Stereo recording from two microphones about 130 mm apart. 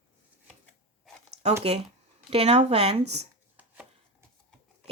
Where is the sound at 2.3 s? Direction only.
50° right (ahead or behind).